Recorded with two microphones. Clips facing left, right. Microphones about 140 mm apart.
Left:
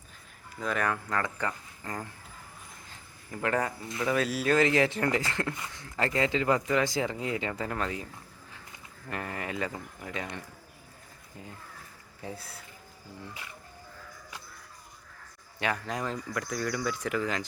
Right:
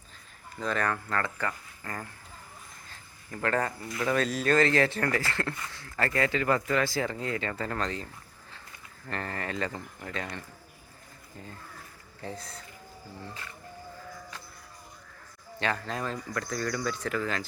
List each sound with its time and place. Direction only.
0.6 s speech: 10° left (ahead or behind)
2.9 s a sound: 15° left (ahead or behind)
3.9 s speech: 5° left (ahead or behind)
9.0 s speech: 10° left (ahead or behind)
12.2 s speech: 10° left (ahead or behind)
15.6 s speech: 15° left (ahead or behind)